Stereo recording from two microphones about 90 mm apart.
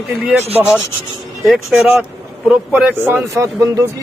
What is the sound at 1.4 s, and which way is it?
Speech, 5° right (ahead or behind).